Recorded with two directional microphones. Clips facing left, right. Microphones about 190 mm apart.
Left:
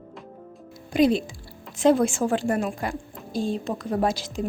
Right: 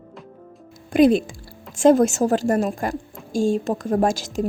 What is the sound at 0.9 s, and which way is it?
A woman's voice, 50° right (ahead or behind).